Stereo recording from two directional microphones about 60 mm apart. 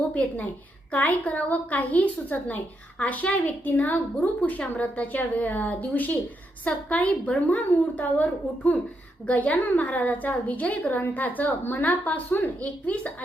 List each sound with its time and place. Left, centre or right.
0.9 s a woman's voice: left